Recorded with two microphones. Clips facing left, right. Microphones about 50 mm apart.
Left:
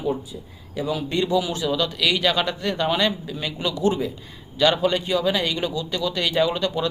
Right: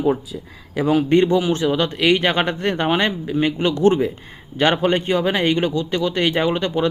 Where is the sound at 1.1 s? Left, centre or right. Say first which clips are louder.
Right 4 dB; right.